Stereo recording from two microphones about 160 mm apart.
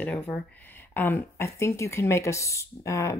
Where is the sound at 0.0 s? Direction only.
10° left (ahead or behind).